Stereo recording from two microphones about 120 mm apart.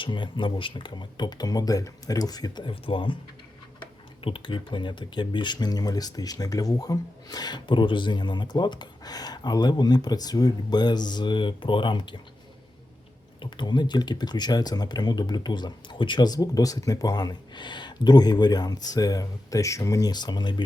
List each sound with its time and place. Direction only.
0.0 s speech: 40° left (ahead or behind)
13.4 s speech: 40° left (ahead or behind)